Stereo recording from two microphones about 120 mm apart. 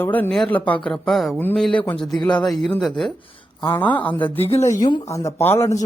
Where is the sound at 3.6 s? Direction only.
15° left (ahead or behind).